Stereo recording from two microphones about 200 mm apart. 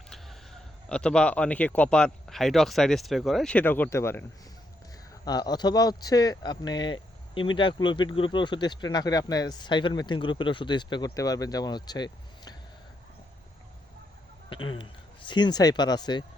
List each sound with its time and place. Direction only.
0.1 s speech: centre (ahead or behind); by 12.5 s 20° left (ahead or behind)
14.5 s speech: 25° left (ahead or behind)